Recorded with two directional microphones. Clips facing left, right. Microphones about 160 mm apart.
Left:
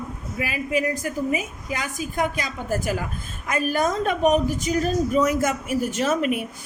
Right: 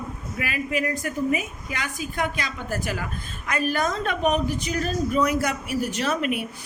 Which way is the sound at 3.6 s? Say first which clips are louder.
Left 3 dB; 45° left (ahead or behind).